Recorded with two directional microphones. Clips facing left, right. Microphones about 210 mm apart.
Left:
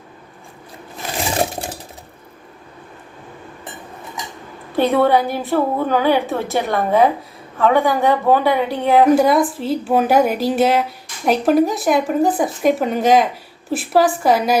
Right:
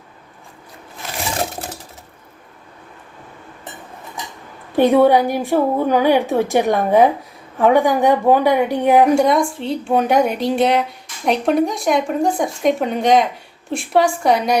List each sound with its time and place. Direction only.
4.8 s a woman's voice: 15° right (ahead or behind)
9.0 s a woman's voice: centre (ahead or behind)